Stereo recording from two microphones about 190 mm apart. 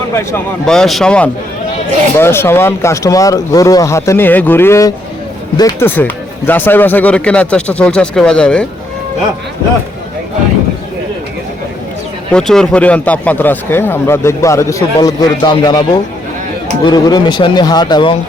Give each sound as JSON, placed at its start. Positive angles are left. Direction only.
{"t": 0.1, "sound": "speech", "side_deg": 15}
{"t": 0.6, "sound": "speech", "side_deg": 0}
{"t": 12.3, "sound": "speech", "side_deg": 5}